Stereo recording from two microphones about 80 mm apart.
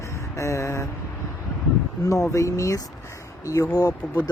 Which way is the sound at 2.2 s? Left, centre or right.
Left.